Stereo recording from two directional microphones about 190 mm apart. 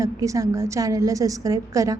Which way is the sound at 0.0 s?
15° right (ahead or behind).